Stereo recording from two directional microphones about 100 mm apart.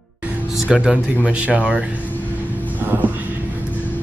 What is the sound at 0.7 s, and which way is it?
Speech, 5° right (ahead or behind).